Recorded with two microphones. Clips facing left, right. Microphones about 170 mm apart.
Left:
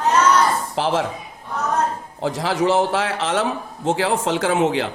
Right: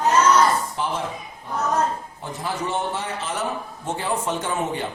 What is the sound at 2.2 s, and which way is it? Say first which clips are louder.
Speech: left 10 dB; 90° left.